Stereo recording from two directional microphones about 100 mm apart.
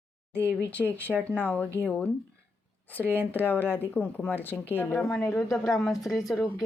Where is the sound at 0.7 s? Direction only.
20° left (ahead or behind).